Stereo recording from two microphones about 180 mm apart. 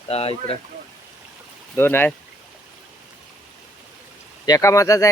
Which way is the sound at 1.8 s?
10° left (ahead or behind).